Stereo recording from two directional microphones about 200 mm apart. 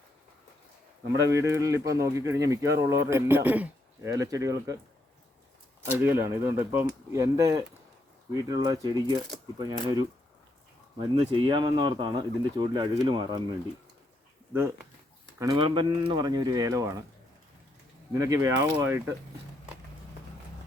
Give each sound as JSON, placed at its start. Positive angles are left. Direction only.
{"t": 1.1, "sound": "speech", "side_deg": -15}
{"t": 5.8, "sound": "speech", "side_deg": -10}
{"t": 15.4, "sound": "speech", "side_deg": -20}
{"t": 18.1, "sound": "speech", "side_deg": -15}